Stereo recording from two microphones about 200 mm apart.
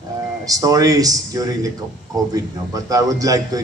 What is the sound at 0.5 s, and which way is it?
A man's voice, 15° right (ahead or behind).